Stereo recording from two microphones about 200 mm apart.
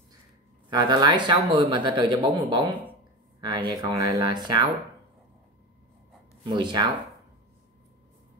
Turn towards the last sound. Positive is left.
turn(degrees=-20)  # may be behind; listen again after turning